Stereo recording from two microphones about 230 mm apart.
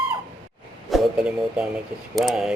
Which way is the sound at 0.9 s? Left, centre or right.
Centre.